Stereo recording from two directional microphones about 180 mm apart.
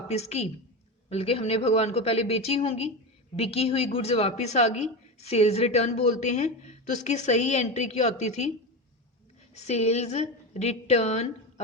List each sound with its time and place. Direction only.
0.1 s a woman's voice: 35° left (ahead or behind)
9.6 s a woman's voice: 35° left (ahead or behind)